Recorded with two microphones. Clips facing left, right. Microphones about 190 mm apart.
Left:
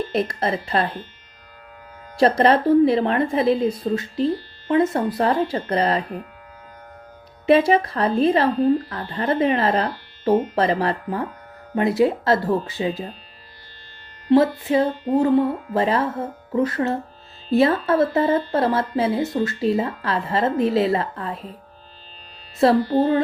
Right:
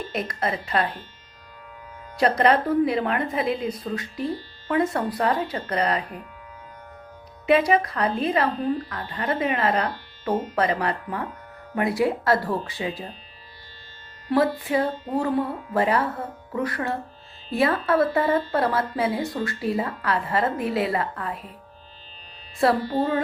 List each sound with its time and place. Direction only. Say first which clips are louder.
0.1 s speech: left 5 dB; 30° left (ahead or behind)
2.1 s speech: left 3 dB; 30° left (ahead or behind)
7.4 s speech: left 3 dB; 30° left (ahead or behind)
14.3 s speech: left 5 dB; 25° left (ahead or behind)